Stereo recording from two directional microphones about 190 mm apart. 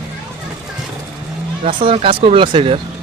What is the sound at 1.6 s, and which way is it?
Speech, 30° right (ahead or behind).